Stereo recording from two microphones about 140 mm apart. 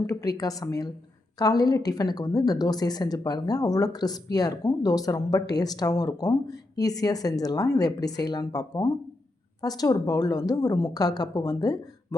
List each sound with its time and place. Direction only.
0.0 s a woman's voice: 25° left (ahead or behind)